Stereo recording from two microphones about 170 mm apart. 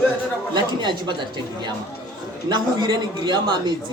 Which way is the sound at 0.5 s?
25° right (ahead or behind).